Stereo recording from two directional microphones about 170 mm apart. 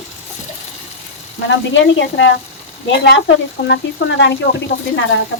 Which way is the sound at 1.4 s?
90° left.